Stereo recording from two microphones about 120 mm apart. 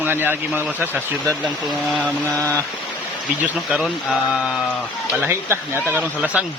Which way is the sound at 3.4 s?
5° right (ahead or behind).